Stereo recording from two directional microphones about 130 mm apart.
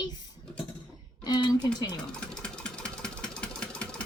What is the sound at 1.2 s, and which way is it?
Speech, 35° left (ahead or behind).